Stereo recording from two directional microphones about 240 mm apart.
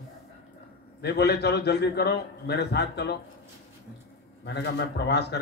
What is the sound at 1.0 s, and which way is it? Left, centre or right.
Speech, left.